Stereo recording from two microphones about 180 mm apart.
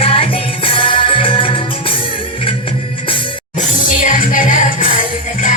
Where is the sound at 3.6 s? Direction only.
45° left (ahead or behind).